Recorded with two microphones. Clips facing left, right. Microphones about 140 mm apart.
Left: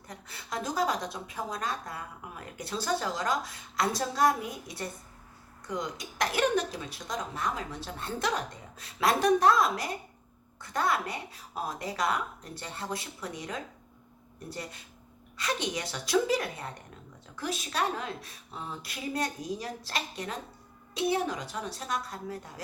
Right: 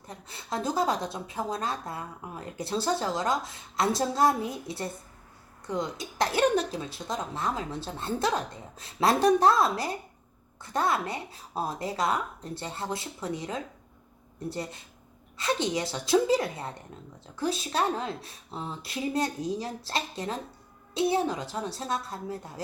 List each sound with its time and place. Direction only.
0.1 s a woman's voice: 25° right (ahead or behind)